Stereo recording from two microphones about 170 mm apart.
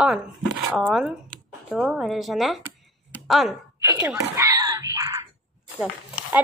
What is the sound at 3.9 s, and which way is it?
Wail, 15° right (ahead or behind).